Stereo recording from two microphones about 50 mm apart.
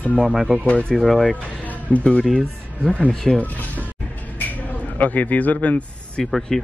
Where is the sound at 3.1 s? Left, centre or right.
Centre.